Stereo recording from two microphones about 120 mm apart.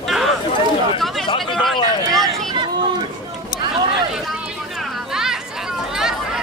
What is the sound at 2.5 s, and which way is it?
Chatter, 40° right (ahead or behind).